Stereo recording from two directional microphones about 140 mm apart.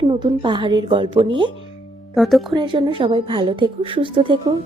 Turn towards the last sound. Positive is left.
turn(degrees=-35)  # may be behind; listen again after turning